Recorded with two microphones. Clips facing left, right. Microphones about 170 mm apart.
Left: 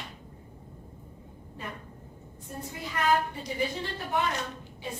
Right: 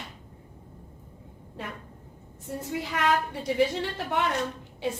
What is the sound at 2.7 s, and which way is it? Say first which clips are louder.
A woman's voice: right 1 dB; 80° right.